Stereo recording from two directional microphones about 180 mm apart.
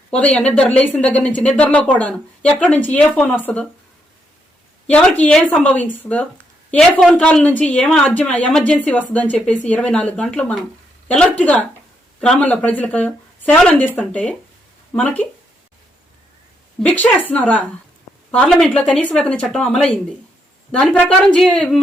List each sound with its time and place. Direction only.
0.1 s a woman's voice: 5° left (ahead or behind)
4.9 s a woman's voice: 5° left (ahead or behind)
16.8 s a woman's voice: 10° left (ahead or behind)